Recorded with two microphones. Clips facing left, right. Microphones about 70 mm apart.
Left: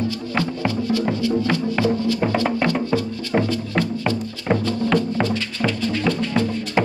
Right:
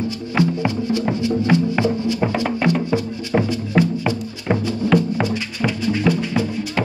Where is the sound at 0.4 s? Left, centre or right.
Centre.